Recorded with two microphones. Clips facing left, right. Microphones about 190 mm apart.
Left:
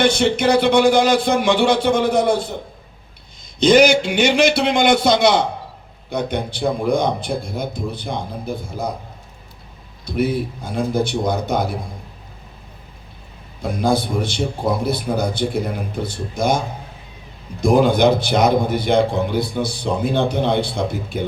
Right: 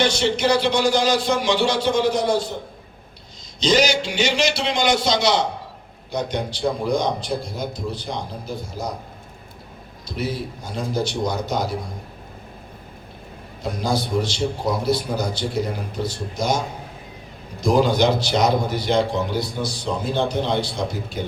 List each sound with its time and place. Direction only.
0.0 s a man's voice: 55° left (ahead or behind)
3.6 s a man's voice: 55° left (ahead or behind)
10.1 s a man's voice: 55° left (ahead or behind)
13.6 s a man's voice: 55° left (ahead or behind)
17.6 s a man's voice: 55° left (ahead or behind)